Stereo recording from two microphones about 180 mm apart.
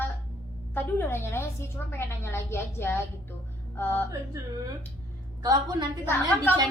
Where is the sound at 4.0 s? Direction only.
15° right (ahead or behind).